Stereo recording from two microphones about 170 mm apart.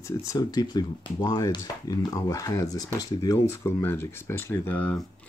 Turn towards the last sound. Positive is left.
turn(degrees=10)  # may be behind; listen again after turning